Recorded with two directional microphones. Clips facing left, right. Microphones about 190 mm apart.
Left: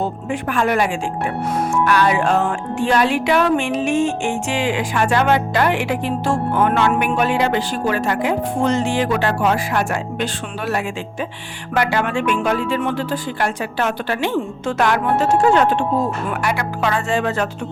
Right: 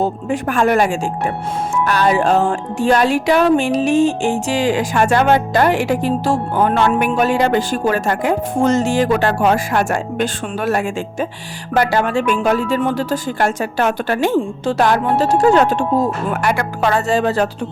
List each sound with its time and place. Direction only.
0.0 s speech: 40° right (ahead or behind)
14.3 s speech: 35° right (ahead or behind)